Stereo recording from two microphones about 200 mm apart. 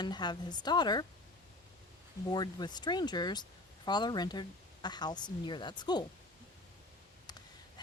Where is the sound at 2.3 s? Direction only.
20° left (ahead or behind).